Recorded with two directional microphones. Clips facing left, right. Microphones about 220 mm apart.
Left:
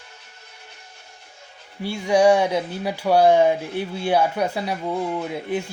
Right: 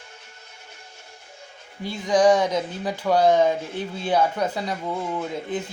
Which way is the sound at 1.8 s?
10° left (ahead or behind).